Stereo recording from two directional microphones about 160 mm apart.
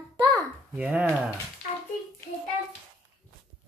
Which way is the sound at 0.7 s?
10° right (ahead or behind).